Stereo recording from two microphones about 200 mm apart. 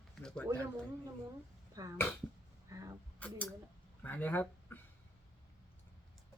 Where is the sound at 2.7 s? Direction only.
15° right (ahead or behind).